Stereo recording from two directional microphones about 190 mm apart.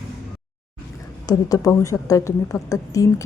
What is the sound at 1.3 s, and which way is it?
Speech, 20° left (ahead or behind).